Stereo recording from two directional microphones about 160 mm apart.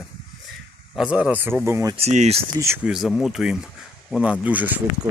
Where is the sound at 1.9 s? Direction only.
45° right (ahead or behind).